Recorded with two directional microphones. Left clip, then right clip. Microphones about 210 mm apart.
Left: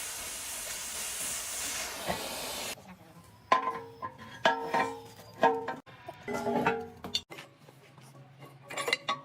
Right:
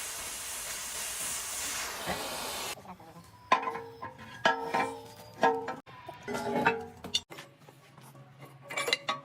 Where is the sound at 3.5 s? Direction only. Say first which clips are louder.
Left 1 dB; centre (ahead or behind).